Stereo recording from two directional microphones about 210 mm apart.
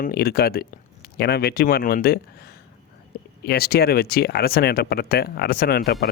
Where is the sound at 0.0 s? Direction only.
45° left (ahead or behind).